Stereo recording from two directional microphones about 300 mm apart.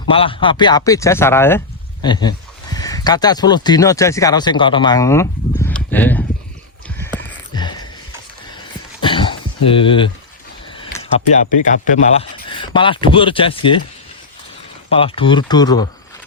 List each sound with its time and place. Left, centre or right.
0.1 s speech: centre
7.0 s a sound: centre
8.5 s throat clearing: centre
11.6 s speech: left
14.8 s speech: centre